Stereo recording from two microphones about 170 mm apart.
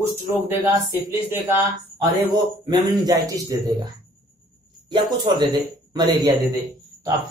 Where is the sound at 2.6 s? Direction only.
25° right (ahead or behind).